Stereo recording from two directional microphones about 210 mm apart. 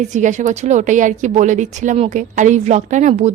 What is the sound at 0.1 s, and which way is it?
Speech, 35° right (ahead or behind).